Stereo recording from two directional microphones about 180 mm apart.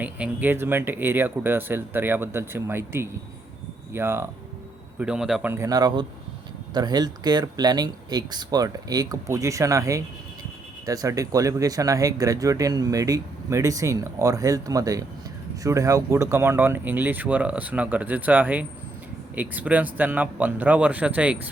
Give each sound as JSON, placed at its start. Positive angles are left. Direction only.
{"t": 0.0, "sound": "speech", "side_deg": -10}